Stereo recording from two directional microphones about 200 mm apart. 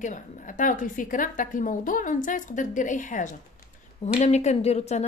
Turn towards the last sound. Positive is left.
turn(degrees=30)  # may be behind; listen again after turning